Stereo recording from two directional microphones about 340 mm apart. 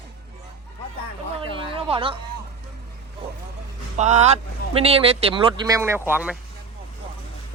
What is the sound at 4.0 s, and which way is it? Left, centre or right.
Speech, centre.